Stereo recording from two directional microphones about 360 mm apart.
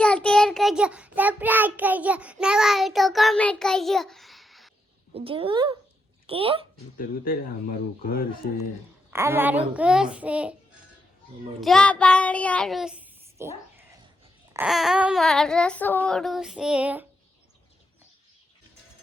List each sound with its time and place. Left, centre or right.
0.0 s child singing: centre
5.1 s a woman's voice: centre
6.9 s speech: left
9.0 s a sound: centre
11.6 s child singing: centre
14.5 s a sound: centre